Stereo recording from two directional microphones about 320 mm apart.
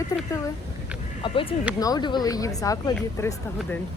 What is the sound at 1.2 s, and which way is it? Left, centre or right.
A woman's voice, centre.